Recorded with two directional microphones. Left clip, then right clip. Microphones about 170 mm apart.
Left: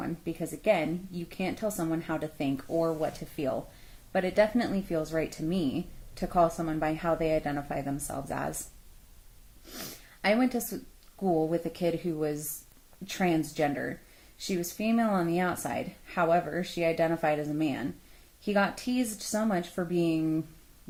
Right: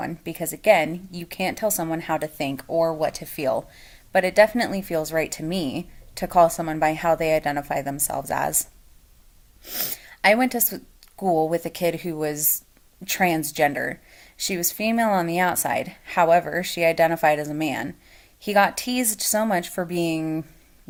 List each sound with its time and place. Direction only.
0.0 s a woman's voice: 15° right (ahead or behind)
9.7 s a woman's voice: 15° right (ahead or behind)